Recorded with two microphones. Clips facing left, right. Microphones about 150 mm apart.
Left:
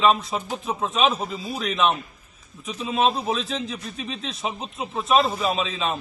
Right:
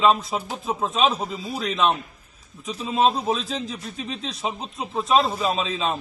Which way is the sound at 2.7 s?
35° right (ahead or behind).